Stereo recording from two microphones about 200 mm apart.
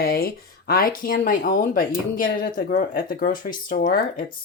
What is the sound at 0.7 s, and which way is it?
Speech, 45° left (ahead or behind).